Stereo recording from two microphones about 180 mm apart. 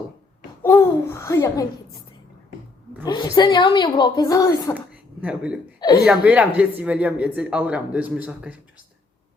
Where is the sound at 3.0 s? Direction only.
25° left (ahead or behind).